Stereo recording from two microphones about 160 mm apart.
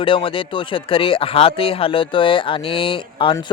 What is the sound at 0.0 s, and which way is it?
Speech, 35° left (ahead or behind).